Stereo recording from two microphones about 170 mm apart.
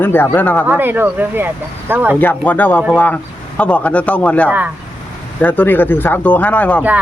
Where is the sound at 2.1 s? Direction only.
10° left (ahead or behind).